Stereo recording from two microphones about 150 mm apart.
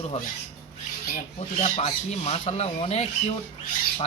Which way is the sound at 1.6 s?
45° left (ahead or behind).